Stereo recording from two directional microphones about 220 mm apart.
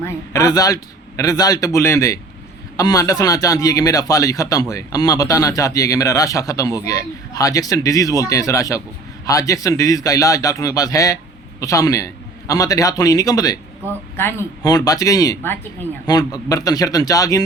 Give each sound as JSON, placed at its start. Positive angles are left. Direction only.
{"t": 0.0, "sound": "speech", "side_deg": 15}